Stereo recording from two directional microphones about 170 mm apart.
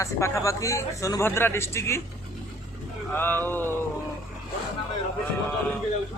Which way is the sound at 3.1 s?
10° left (ahead or behind).